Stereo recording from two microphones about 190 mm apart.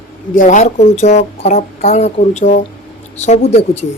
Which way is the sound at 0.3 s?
40° left (ahead or behind).